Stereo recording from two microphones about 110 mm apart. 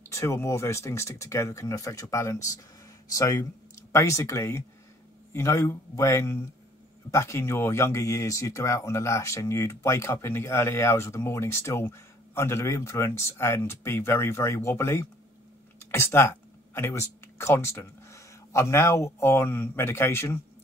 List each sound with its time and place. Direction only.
0.0 s speech: 25° left (ahead or behind)